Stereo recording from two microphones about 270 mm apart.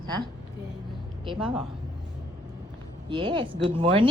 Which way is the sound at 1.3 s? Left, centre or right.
Centre.